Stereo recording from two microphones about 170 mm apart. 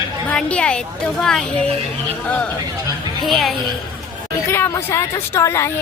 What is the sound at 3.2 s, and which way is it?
Speech, centre (ahead or behind).